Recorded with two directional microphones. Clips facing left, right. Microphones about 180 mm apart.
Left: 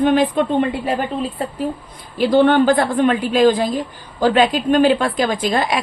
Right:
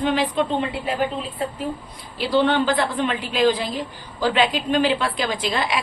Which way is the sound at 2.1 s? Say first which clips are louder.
Left 6 dB; 50° left (ahead or behind).